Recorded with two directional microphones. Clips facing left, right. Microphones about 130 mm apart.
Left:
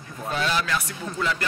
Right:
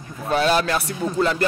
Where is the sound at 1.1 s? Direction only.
35° right (ahead or behind).